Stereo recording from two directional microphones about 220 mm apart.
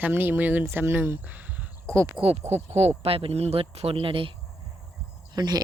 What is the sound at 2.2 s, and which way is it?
Speech, 25° right (ahead or behind).